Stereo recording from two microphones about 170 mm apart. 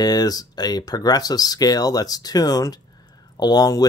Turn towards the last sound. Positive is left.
turn(degrees=25)  # may be behind; listen again after turning